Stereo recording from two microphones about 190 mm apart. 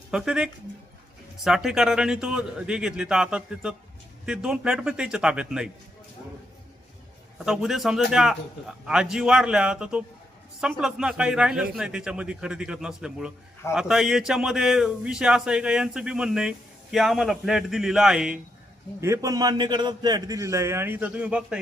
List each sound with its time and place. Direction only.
0.1 s speech: 5° right (ahead or behind)
7.4 s speech: centre (ahead or behind)
18.9 s a man's voice: 15° right (ahead or behind)